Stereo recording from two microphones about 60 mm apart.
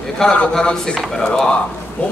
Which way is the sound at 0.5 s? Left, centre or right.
Centre.